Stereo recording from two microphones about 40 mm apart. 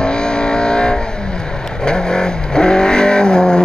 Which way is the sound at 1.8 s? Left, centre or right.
Left.